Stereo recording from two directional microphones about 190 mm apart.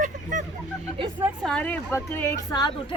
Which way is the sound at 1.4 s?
5° left (ahead or behind).